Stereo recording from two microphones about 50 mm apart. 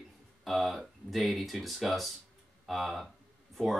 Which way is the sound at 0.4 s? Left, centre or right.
Centre.